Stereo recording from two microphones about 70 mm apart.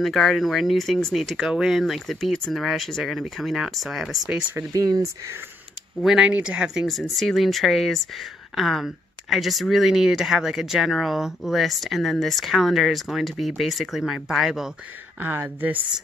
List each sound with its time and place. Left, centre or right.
0.0 s speech: centre
4.7 s speech: right
6.0 s speech: centre
6.9 s speech: centre
15.1 s speech: right